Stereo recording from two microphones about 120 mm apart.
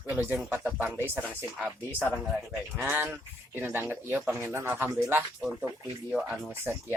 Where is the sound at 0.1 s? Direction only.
15° right (ahead or behind).